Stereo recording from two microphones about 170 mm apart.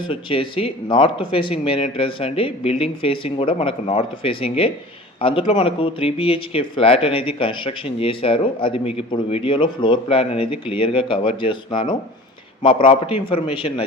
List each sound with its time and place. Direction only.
0.1 s speech: 30° left (ahead or behind)